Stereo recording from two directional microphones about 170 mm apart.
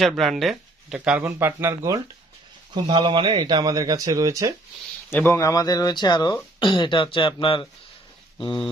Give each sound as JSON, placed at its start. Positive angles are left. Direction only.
{"t": 0.0, "sound": "speech", "side_deg": 0}
{"t": 5.1, "sound": "speech", "side_deg": 15}